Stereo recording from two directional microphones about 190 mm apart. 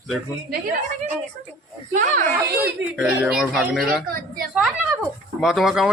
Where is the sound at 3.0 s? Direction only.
5° right (ahead or behind).